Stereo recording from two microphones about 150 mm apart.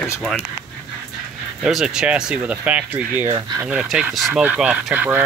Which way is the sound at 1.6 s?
5° right (ahead or behind).